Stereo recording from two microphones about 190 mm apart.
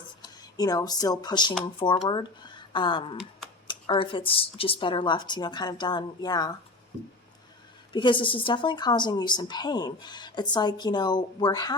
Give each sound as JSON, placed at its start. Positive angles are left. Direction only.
{"t": 0.2, "sound": "speech", "side_deg": 20}
{"t": 7.9, "sound": "speech", "side_deg": 25}